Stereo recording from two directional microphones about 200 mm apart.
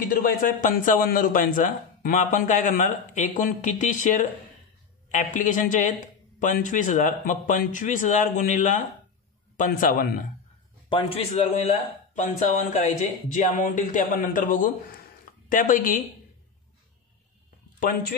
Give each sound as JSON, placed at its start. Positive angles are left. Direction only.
{"t": 0.1, "sound": "a man's voice", "side_deg": 45}
{"t": 10.9, "sound": "a man's voice", "side_deg": 25}